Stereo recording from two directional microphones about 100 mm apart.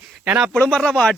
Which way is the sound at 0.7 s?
10° left (ahead or behind).